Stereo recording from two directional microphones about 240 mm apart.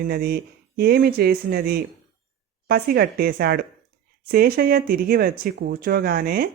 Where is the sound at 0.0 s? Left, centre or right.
Right.